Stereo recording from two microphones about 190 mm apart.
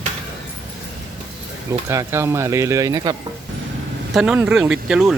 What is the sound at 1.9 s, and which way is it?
Speech, 15° right (ahead or behind).